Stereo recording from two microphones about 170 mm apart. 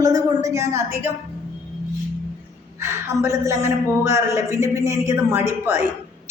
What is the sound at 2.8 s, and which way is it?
A man's voice, 15° right (ahead or behind).